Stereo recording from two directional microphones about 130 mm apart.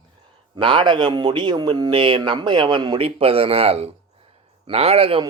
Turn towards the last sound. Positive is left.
turn(degrees=-45)  # may be behind; listen again after turning